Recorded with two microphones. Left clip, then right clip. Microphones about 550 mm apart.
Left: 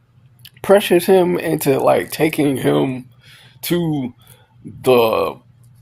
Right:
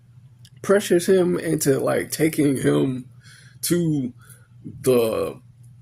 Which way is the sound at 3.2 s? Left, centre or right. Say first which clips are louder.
Left 1 dB; right.